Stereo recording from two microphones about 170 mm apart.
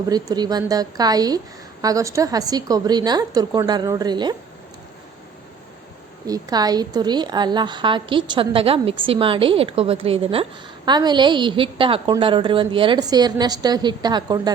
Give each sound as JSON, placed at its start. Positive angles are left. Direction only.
{"t": 0.1, "sound": "a woman's voice", "side_deg": -25}
{"t": 6.2, "sound": "a woman's voice", "side_deg": -20}